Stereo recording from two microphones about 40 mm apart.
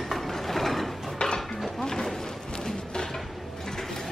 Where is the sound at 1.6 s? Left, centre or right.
Centre.